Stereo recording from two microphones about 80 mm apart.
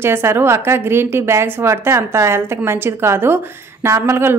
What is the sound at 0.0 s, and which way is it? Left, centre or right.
A woman's voice, right.